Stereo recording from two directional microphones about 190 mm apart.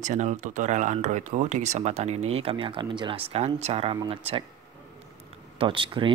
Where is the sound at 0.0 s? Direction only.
40° right (ahead or behind).